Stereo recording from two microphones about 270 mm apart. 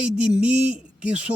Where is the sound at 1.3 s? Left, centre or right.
Centre.